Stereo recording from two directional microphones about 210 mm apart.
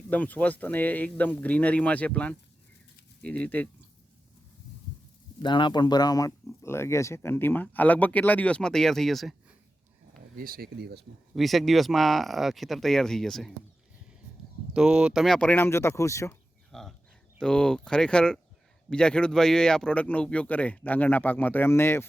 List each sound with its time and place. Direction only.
0.1 s speech: 5° left (ahead or behind)
5.4 s speech: 20° left (ahead or behind); by 9.3 s centre (ahead or behind)
10.3 s speech: 45° right (ahead or behind)
11.3 s speech: centre (ahead or behind)
14.7 s speech: 5° right (ahead or behind); by 16.3 s 15° left (ahead or behind)
16.7 s livestock: 5° left (ahead or behind)
17.3 s speech: 5° left (ahead or behind)